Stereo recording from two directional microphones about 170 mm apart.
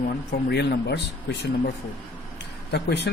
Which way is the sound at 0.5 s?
75° left (ahead or behind).